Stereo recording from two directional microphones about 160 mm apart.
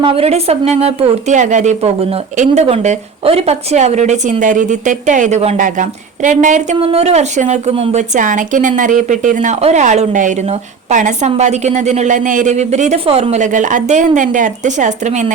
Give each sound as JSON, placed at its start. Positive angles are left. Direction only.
{"t": 0.0, "sound": "a woman's voice", "side_deg": -35}
{"t": 6.7, "sound": "a woman's voice", "side_deg": -35}